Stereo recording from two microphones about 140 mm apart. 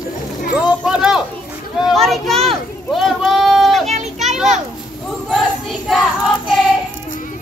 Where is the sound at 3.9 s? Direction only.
55° right (ahead or behind).